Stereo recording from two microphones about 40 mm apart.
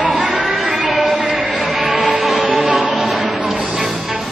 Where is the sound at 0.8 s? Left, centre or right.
Centre.